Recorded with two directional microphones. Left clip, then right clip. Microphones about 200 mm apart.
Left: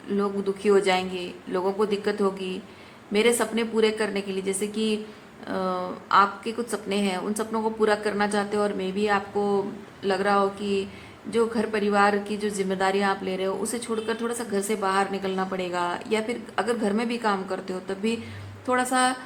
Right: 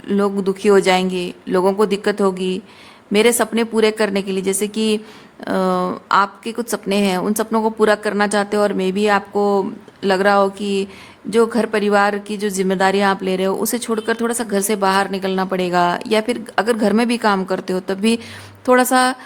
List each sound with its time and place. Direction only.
0.1 s a woman's voice: 55° right (ahead or behind)